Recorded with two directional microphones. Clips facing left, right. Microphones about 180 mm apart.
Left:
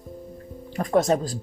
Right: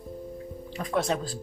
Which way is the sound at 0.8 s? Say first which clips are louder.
Left 7 dB; 45° left (ahead or behind).